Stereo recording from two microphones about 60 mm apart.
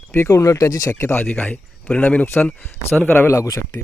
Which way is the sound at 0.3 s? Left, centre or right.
Left.